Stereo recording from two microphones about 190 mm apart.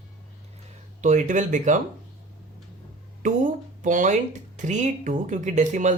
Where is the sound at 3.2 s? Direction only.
40° right (ahead or behind).